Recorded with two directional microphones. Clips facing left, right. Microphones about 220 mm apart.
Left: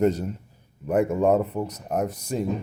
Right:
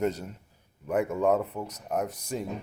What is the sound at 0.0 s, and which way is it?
Speech, 35° left (ahead or behind).